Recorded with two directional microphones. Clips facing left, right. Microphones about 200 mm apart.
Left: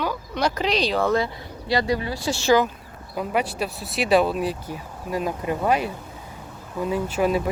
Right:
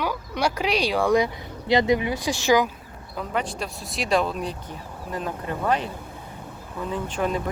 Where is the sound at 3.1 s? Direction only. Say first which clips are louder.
Left 3 dB; 10° left (ahead or behind).